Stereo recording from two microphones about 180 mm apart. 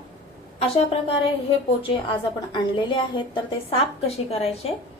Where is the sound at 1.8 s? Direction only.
30° left (ahead or behind).